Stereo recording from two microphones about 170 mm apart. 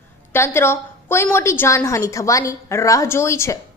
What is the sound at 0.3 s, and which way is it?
A woman's voice, 15° left (ahead or behind).